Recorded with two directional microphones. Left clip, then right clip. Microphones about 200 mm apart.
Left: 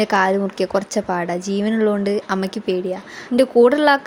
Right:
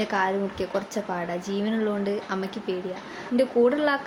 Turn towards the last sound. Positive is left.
turn(degrees=45)  # may be behind; listen again after turning